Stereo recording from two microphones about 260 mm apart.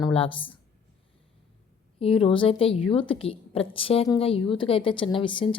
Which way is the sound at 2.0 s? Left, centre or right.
Left.